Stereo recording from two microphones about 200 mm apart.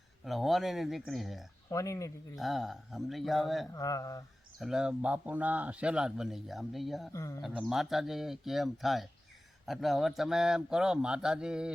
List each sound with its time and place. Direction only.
0.3 s speech: centre (ahead or behind)
1.7 s mantra: 15° left (ahead or behind)
2.3 s speech: centre (ahead or behind)
3.7 s mantra: 15° left (ahead or behind)
4.6 s speech: 5° right (ahead or behind)
7.1 s mantra: 15° left (ahead or behind)
7.4 s speech: centre (ahead or behind)